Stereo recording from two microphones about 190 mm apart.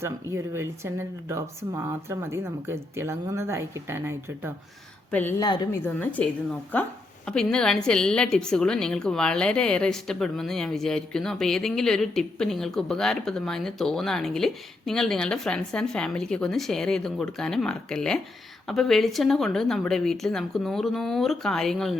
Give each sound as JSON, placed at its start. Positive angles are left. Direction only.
{"t": 0.0, "sound": "speech", "side_deg": -15}
{"t": 5.4, "sound": "speech", "side_deg": 20}
{"t": 5.8, "sound": "a woman's voice", "side_deg": 10}
{"t": 7.3, "sound": "a woman's voice", "side_deg": 5}